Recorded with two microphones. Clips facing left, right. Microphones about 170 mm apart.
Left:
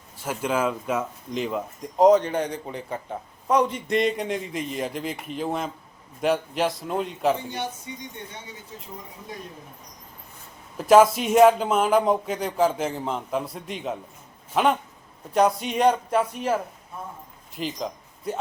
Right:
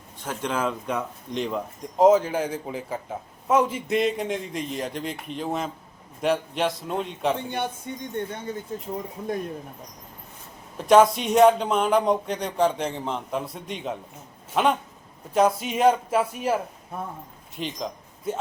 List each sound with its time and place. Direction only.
0.2 s speech: 5° left (ahead or behind)
7.5 s speech: 55° right (ahead or behind)
10.8 s speech: centre (ahead or behind)
17.6 s speech: centre (ahead or behind)